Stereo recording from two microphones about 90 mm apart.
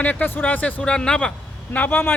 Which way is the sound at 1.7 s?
20° left (ahead or behind).